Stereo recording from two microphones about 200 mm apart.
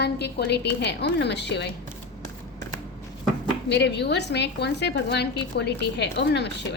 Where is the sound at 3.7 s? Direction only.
55° left (ahead or behind).